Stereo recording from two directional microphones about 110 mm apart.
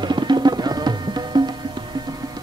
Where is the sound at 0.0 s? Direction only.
45° right (ahead or behind).